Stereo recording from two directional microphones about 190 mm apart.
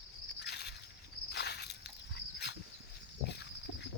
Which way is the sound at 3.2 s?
60° left (ahead or behind).